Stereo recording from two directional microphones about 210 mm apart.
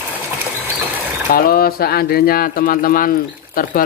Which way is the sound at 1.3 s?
45° left (ahead or behind).